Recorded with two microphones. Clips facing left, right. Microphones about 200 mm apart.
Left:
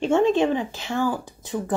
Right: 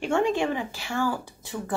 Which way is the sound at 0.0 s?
20° left (ahead or behind).